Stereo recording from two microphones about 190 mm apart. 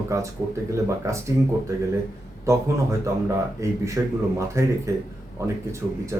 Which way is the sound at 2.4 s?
15° right (ahead or behind).